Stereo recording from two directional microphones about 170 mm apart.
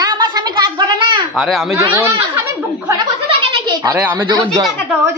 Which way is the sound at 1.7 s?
15° right (ahead or behind).